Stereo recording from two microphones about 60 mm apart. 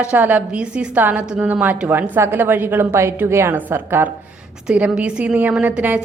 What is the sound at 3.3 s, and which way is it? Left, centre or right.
Speech, right.